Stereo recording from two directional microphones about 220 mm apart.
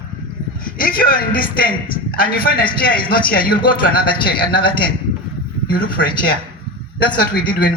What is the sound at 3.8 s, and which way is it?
Speech, 40° left (ahead or behind).